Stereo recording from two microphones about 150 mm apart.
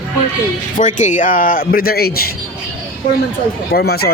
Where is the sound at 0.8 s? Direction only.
55° left (ahead or behind); by 2.3 s 90° left.